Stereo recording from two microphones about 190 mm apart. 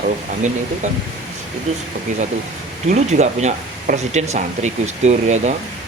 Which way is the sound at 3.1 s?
35° right (ahead or behind).